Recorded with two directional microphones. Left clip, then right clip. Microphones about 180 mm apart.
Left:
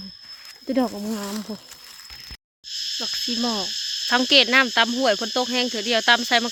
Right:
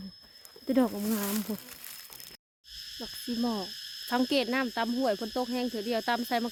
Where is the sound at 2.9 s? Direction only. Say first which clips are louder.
Left 10 dB; 15° left (ahead or behind).